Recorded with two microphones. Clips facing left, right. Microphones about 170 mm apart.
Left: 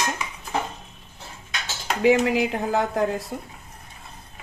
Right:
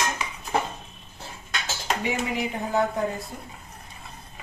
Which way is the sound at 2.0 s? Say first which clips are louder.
Left 12 dB; 90° left.